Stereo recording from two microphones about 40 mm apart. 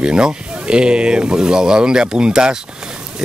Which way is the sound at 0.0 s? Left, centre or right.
Right.